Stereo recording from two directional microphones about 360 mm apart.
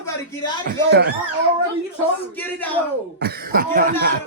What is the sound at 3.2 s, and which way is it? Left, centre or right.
Speech, right.